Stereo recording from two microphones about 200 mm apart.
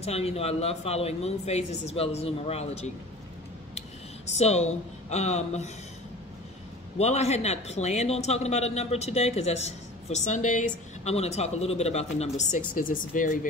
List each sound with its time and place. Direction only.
0.0 s speech: 30° left (ahead or behind)
4.3 s speech: 35° left (ahead or behind)
7.0 s speech: 35° left (ahead or behind)